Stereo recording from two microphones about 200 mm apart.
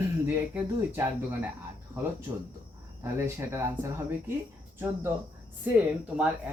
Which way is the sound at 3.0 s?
15° right (ahead or behind).